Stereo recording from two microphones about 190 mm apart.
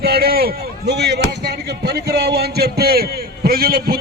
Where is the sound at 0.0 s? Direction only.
55° right (ahead or behind).